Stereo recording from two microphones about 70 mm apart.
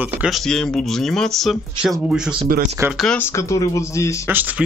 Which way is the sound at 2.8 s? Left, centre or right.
Right.